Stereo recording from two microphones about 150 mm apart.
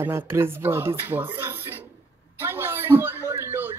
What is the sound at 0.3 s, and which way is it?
A man's voice, 15° right (ahead or behind).